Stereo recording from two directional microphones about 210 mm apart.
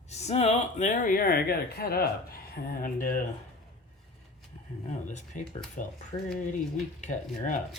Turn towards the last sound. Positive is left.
turn(degrees=35)  # may be behind; listen again after turning